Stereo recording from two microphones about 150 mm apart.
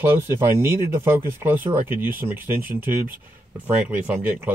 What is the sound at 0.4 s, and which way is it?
Speech, 15° right (ahead or behind).